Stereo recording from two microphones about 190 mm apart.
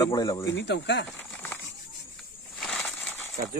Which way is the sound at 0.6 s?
65° left (ahead or behind).